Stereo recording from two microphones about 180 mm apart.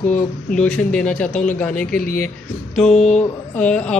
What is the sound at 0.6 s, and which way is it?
Speech, 5° left (ahead or behind).